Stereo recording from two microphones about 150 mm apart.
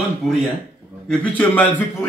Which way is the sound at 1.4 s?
10° left (ahead or behind).